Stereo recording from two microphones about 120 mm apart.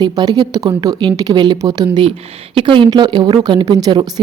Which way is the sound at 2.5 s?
45° right (ahead or behind).